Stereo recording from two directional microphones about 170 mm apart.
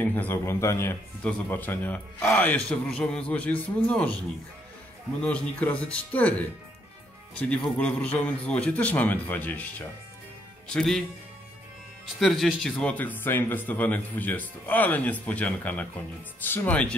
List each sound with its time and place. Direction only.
0.0 s a man's voice: 10° left (ahead or behind)
5.2 s a man's voice: 10° left (ahead or behind)
12.2 s a man's voice: centre (ahead or behind)